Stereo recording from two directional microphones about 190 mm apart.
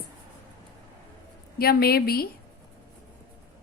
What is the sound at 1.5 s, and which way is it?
Speech, 55° left (ahead or behind).